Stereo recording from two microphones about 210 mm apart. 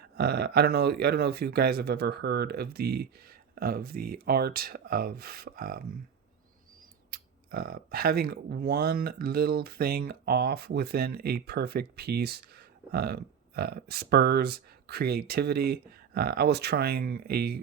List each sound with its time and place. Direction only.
0.2 s speech: 50° right (ahead or behind)
7.1 s speech: 45° right (ahead or behind)